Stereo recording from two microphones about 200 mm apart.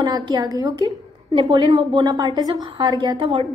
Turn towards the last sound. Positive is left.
turn(degrees=-20)  # may be behind; listen again after turning